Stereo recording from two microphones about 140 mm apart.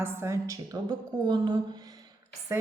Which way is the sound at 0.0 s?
20° right (ahead or behind).